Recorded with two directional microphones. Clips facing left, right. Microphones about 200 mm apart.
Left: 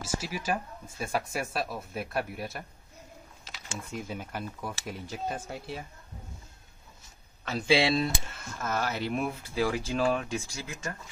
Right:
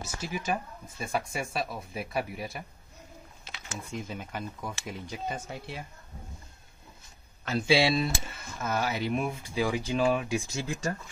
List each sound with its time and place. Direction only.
0.2 s speech: 5° left (ahead or behind)
3.9 s speech: 5° left (ahead or behind)
7.4 s speech: centre (ahead or behind)
10.5 s speech: 30° right (ahead or behind)